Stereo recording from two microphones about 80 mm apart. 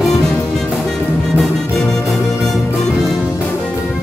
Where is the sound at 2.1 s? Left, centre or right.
Centre.